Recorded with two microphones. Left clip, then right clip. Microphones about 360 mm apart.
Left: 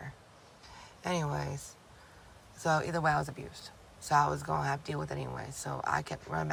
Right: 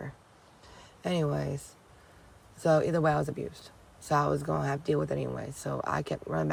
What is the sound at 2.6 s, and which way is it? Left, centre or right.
Speech, centre.